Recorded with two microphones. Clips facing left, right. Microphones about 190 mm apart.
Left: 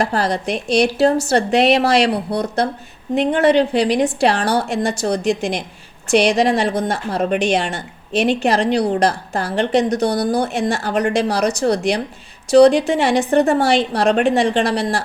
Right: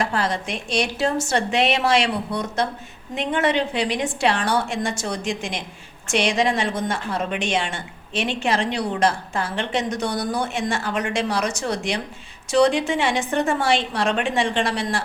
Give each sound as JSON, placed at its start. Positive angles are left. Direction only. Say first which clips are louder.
{"t": 0.0, "sound": "a woman's voice", "louder": "left 5 dB", "side_deg": 35}